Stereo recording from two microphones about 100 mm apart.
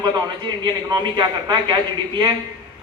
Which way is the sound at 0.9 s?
45° right (ahead or behind).